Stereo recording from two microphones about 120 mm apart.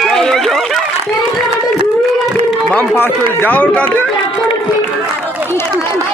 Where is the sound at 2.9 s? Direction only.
15° left (ahead or behind).